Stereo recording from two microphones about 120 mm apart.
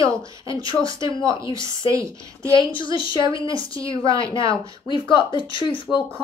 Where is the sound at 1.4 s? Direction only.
40° left (ahead or behind).